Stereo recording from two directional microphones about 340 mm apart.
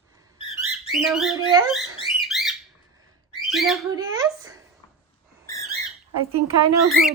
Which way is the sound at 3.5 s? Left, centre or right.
Centre.